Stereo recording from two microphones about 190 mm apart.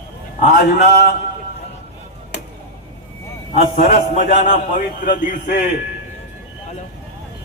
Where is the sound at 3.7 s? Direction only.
45° left (ahead or behind).